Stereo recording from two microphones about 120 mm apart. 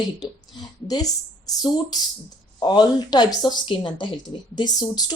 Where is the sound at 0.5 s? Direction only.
40° left (ahead or behind).